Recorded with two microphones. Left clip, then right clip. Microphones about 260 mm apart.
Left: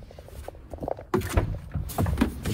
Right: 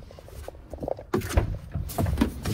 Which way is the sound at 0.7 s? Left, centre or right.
Right.